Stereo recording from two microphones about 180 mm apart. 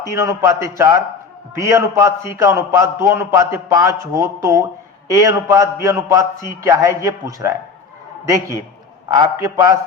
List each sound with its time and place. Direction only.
0.0 s a man's voice: 15° right (ahead or behind)
9.0 s a man's voice: 20° right (ahead or behind)